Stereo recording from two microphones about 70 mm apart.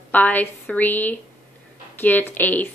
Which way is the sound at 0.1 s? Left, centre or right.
Left.